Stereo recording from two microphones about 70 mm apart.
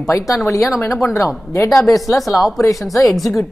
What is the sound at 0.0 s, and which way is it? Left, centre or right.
A woman's voice, left.